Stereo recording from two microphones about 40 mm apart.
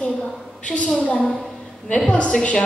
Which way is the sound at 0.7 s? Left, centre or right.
Left.